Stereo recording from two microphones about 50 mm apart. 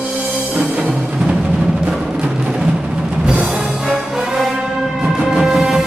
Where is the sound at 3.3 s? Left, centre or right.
Centre.